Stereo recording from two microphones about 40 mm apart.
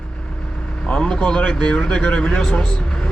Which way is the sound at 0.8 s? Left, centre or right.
Left.